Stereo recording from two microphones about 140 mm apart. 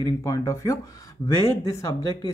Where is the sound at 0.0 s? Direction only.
25° left (ahead or behind).